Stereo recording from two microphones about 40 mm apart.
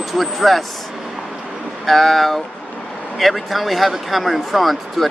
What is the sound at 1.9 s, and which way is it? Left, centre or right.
Speech, centre.